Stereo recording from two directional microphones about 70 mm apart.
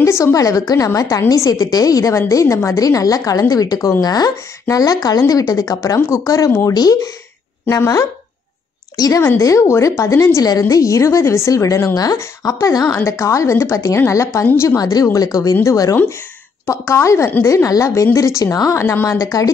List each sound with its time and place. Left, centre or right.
0.0 s a woman's voice: left
6.7 s speech: left
7.7 s a woman's voice: left
9.4 s a woman's voice: left
11.9 s a woman's voice: left
14.8 s a woman's voice: left
16.6 s a woman's voice: left
19.0 s speech: left